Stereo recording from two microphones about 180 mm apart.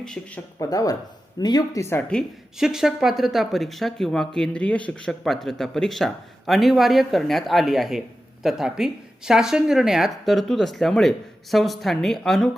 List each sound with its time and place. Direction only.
0.0 s speech: 5° left (ahead or behind)
0.6 s speech: 20° left (ahead or behind)
2.0 s speech: 5° left (ahead or behind)